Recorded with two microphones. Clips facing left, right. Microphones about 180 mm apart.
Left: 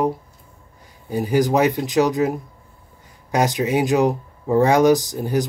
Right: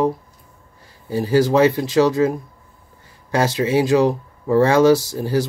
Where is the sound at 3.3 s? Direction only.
15° left (ahead or behind).